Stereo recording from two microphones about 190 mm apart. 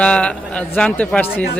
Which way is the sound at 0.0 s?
5° left (ahead or behind).